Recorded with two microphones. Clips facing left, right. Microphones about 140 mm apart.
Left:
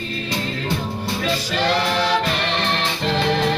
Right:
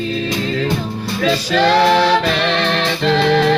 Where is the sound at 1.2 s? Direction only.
90° right.